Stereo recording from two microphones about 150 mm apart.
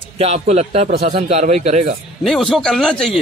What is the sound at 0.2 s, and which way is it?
Speech, 45° right (ahead or behind).